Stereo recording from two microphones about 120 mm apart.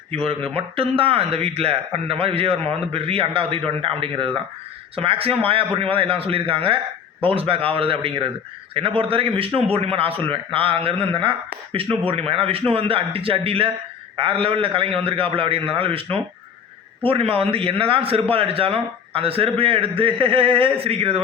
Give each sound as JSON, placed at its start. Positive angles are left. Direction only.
{"t": 0.1, "sound": "a man's voice", "side_deg": -55}